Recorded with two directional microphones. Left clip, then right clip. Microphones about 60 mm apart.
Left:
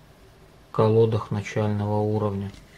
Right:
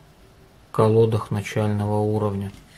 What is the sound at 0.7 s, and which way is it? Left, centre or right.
Speech, right.